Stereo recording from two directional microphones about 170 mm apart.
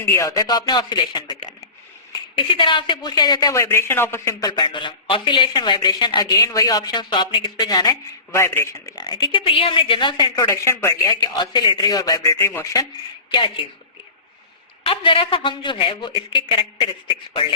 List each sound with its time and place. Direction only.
0.0 s a man's voice: 20° left (ahead or behind)
2.5 s a man's voice: 30° left (ahead or behind)
13.3 s a man's voice: 30° left (ahead or behind)
14.8 s a man's voice: 30° left (ahead or behind)